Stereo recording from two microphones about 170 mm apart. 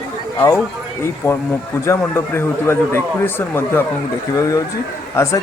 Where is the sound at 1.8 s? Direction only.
15° left (ahead or behind).